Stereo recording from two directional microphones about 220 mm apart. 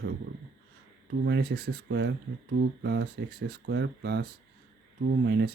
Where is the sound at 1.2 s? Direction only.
50° right (ahead or behind).